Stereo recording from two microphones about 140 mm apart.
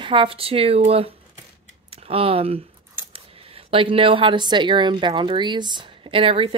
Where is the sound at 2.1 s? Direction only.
45° right (ahead or behind).